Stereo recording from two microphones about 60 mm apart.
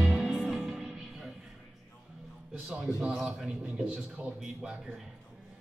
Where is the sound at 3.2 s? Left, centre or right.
Centre.